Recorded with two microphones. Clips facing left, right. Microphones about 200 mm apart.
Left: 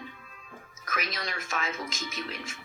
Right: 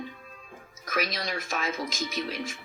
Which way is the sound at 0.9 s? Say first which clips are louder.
Right 5 dB; 40° right (ahead or behind).